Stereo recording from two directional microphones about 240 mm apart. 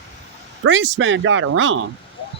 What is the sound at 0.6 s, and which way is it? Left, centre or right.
Speech, right.